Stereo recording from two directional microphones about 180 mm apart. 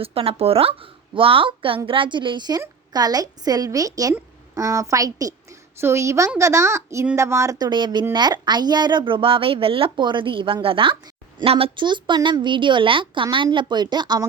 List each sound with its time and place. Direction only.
0.0 s a woman's voice: 30° right (ahead or behind)